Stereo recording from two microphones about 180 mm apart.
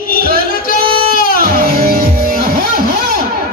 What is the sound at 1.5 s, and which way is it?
Music, 55° right (ahead or behind).